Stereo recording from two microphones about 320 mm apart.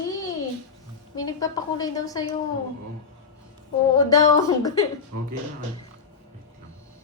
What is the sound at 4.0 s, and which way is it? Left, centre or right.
Speech, centre.